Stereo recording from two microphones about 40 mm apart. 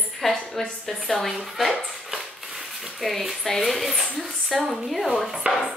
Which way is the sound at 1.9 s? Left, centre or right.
Centre.